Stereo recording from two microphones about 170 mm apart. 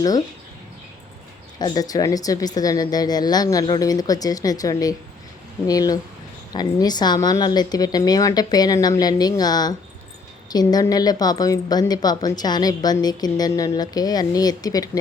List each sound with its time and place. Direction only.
1.5 s speech: 25° left (ahead or behind)